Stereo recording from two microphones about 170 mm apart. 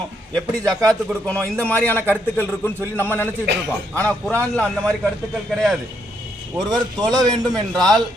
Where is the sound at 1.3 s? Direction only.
15° right (ahead or behind).